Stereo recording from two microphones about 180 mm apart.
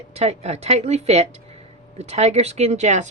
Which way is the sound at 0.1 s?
35° right (ahead or behind).